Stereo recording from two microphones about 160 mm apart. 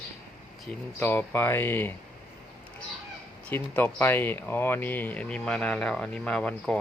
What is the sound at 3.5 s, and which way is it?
Speech, 10° left (ahead or behind).